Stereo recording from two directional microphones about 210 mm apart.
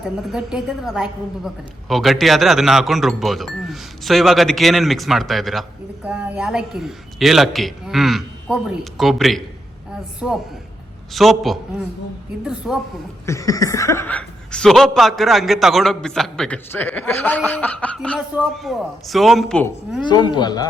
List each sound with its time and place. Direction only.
0.3 s a man's voice: centre (ahead or behind)
13.2 s a man's voice: 15° left (ahead or behind)
20.0 s a woman's voice: 20° left (ahead or behind)